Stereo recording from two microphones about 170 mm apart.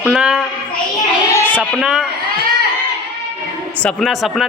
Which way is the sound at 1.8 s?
5° right (ahead or behind).